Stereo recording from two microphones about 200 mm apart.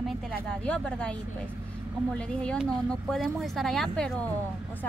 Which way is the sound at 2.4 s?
5° left (ahead or behind).